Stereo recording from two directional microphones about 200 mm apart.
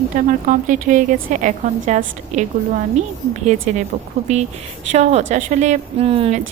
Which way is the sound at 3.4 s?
35° right (ahead or behind).